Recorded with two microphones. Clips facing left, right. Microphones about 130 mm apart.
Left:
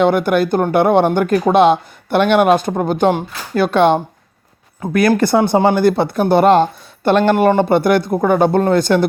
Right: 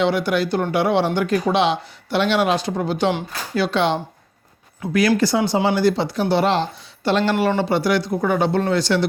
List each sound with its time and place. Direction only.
0.0 s speech: 50° left (ahead or behind)